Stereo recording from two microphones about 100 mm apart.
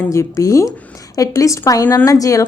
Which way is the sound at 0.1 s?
30° left (ahead or behind).